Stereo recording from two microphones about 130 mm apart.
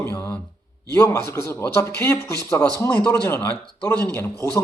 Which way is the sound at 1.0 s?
20° left (ahead or behind).